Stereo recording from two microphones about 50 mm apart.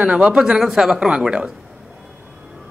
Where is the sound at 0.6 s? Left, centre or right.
Centre.